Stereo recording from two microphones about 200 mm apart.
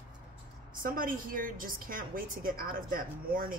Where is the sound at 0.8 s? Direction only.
45° right (ahead or behind).